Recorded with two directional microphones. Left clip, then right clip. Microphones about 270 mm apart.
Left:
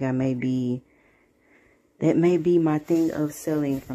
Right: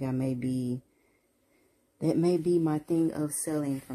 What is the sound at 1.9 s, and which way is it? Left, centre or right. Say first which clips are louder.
Speech: left 6 dB; centre.